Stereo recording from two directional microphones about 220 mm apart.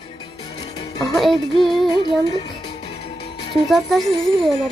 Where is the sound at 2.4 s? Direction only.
25° left (ahead or behind).